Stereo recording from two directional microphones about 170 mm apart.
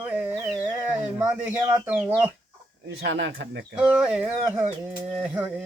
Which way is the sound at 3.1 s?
90° right.